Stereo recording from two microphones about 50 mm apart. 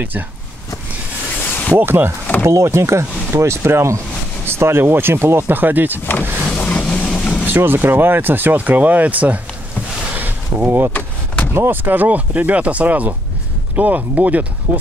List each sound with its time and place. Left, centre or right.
1.8 s speech: right
2.4 s speech: right
4.5 s speech: right
6.5 s vehicle: left
7.4 s speech: right
10.1 s a sound: right
10.9 s vehicle: left
11.5 s speech: right
11.8 s speech: right